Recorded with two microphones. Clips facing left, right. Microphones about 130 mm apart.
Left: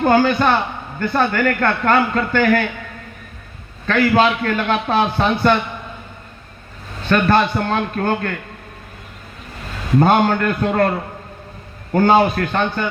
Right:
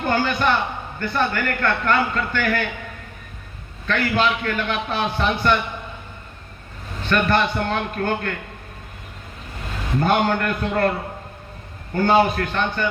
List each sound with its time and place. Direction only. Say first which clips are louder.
0.0 s a man's voice: left 6 dB; 50° left (ahead or behind)
3.8 s a man's voice: left 6 dB; 50° left (ahead or behind)
7.1 s a man's voice: left 4 dB; 50° left (ahead or behind)
10.0 s a man's voice: left 4 dB; 50° left (ahead or behind)
11.9 s a man's voice: left 3 dB; 50° left (ahead or behind)